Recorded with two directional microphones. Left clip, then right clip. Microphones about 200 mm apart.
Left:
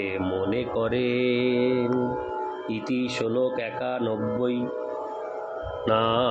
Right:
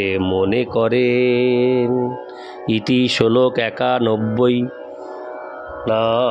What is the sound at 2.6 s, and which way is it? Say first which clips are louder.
Speech: right 10 dB; 55° right (ahead or behind).